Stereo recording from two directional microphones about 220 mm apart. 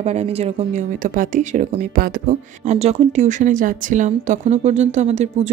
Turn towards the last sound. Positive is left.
turn(degrees=-30)  # may be behind; listen again after turning